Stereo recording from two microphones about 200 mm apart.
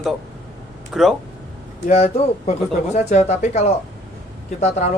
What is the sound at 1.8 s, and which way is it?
Speech, 35° left (ahead or behind).